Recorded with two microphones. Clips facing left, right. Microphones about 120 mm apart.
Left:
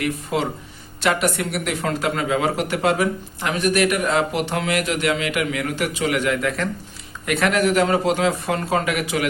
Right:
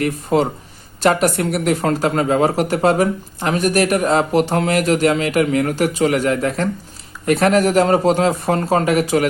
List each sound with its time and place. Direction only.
0.0 s speech: 40° right (ahead or behind)